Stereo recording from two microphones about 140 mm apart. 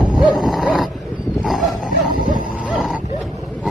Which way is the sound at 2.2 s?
65° right (ahead or behind).